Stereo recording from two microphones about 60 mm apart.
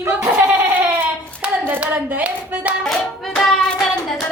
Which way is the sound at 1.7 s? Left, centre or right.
Right.